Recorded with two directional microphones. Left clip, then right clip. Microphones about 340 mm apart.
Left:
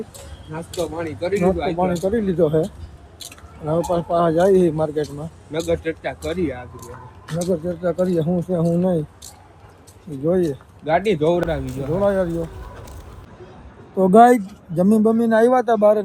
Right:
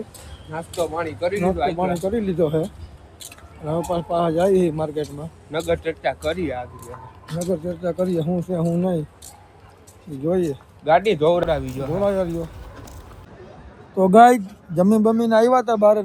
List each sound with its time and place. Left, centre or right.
0.5 s speech: right
1.3 s speech: centre
5.0 s speech: centre
7.5 s speech: centre
10.2 s speech: centre
10.8 s speech: right
11.9 s speech: centre
13.9 s speech: centre